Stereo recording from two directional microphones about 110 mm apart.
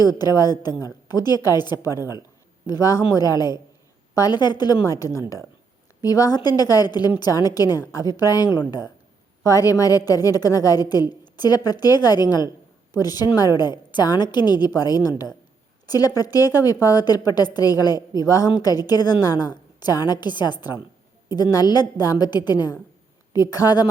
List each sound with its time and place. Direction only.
0.0 s a woman's voice: 35° left (ahead or behind)